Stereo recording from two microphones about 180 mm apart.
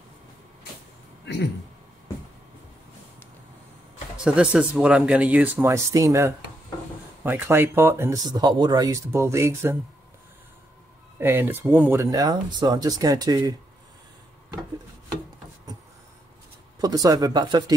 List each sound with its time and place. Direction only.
1.2 s speech: 70° left (ahead or behind)
4.2 s speech: 5° right (ahead or behind)
11.1 s speech: 15° right (ahead or behind)
16.8 s speech: 20° right (ahead or behind)